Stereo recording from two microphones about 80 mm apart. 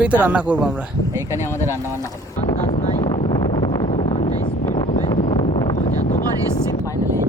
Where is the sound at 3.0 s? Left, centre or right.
Left.